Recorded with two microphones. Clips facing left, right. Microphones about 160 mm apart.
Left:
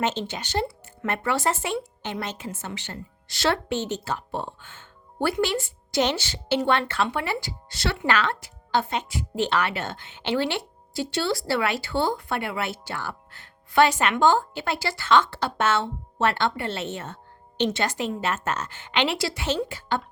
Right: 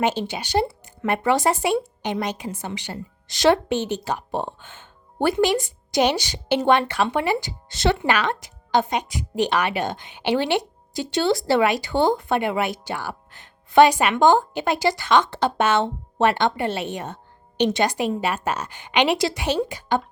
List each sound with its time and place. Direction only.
0.0 s speech: 10° right (ahead or behind)